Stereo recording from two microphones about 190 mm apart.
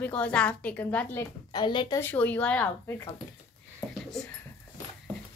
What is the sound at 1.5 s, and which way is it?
Speech, 25° left (ahead or behind).